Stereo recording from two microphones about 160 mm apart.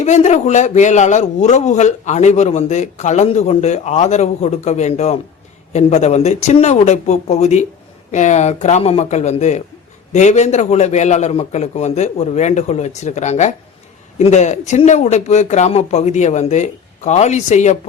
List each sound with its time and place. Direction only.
0.0 s a man's voice: 45° left (ahead or behind)